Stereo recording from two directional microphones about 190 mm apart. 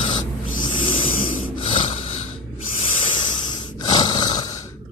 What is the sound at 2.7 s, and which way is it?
Snoring, 25° left (ahead or behind).